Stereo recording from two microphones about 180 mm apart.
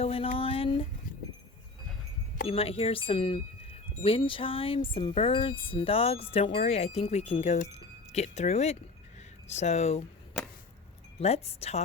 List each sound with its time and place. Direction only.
0.0 s speech: 30° left (ahead or behind)
0.3 s a sound: 30° left (ahead or behind)
2.5 s speech: 30° left (ahead or behind)
11.2 s speech: 35° left (ahead or behind)